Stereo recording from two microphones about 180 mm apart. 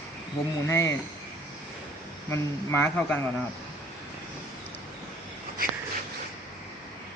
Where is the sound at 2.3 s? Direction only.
10° left (ahead or behind).